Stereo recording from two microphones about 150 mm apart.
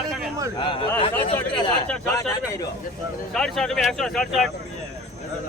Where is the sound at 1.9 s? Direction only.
15° left (ahead or behind).